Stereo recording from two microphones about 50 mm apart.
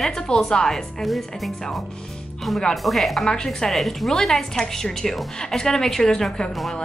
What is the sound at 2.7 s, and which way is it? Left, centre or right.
Speech, centre.